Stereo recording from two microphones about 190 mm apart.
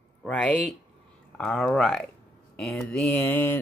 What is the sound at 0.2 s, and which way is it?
Speech, 5° left (ahead or behind).